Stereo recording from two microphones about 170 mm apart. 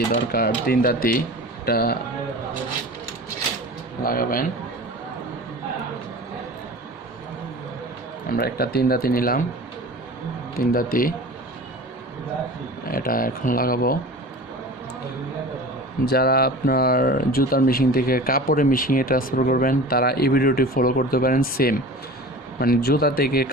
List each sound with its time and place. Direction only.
0.1 s speech: 65° left (ahead or behind)
4.0 s speech: 55° left (ahead or behind)
8.3 s speech: 65° left (ahead or behind)
10.6 s speech: 60° left (ahead or behind)
12.8 s speech: 60° left (ahead or behind)
16.0 s speech: 65° left (ahead or behind)